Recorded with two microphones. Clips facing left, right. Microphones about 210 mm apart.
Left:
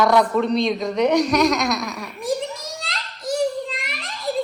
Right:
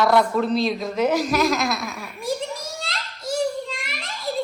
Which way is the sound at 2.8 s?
Centre (ahead or behind).